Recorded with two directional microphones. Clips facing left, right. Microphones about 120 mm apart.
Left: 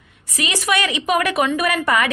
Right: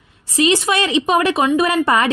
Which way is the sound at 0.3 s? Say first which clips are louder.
Right 6 dB; 30° right (ahead or behind).